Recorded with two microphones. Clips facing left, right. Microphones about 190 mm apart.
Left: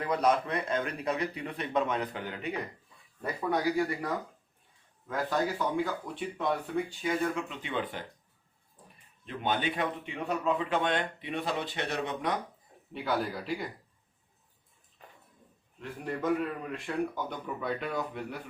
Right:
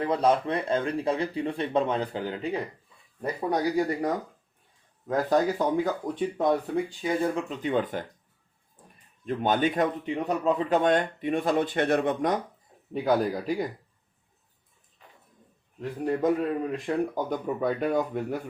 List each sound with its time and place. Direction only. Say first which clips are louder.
0.0 s a man's voice: right 4 dB; 30° right (ahead or behind)
7.4 s speech: right 8 dB; 45° right (ahead or behind)
9.2 s speech: right 7 dB; 45° right (ahead or behind)
12.9 s speech: right 7 dB; 40° right (ahead or behind)
15.8 s speech: right 8 dB; 40° right (ahead or behind)